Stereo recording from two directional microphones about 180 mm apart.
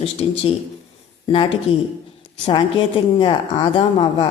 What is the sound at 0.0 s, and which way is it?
Speech, 35° left (ahead or behind).